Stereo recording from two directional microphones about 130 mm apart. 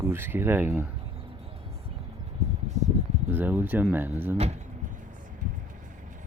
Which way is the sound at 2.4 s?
60° right (ahead or behind).